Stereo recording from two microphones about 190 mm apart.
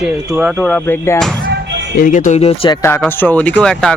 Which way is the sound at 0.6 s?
10° left (ahead or behind).